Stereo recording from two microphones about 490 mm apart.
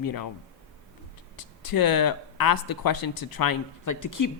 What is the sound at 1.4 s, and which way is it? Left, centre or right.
Speech, left.